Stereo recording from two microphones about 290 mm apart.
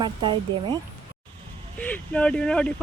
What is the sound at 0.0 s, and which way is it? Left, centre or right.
Speech, centre.